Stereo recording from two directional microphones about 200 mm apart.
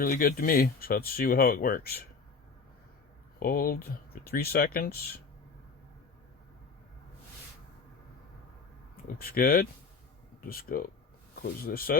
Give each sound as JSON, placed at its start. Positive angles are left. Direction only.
{"t": 0.0, "sound": "speech", "side_deg": 45}
{"t": 3.4, "sound": "speech", "side_deg": 45}
{"t": 9.0, "sound": "speech", "side_deg": 45}